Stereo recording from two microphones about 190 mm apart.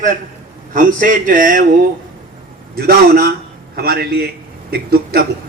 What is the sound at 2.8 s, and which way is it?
A man's voice, 50° right (ahead or behind).